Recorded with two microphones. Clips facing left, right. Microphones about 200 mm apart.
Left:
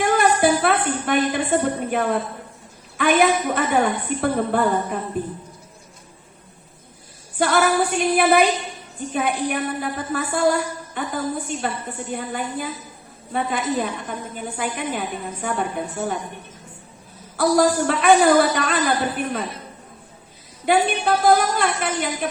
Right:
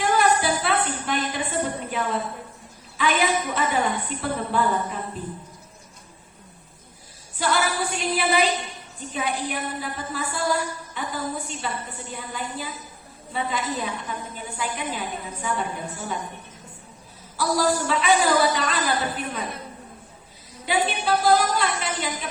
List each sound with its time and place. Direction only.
0.0 s a sound: 50° left (ahead or behind)
3.0 s a woman's voice: 55° left (ahead or behind)
7.3 s a woman's voice: 55° left (ahead or behind)
17.3 s a woman's voice: 55° left (ahead or behind)
20.7 s a woman's voice: 55° left (ahead or behind)